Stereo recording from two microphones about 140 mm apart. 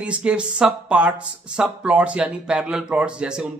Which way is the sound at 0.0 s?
10° right (ahead or behind).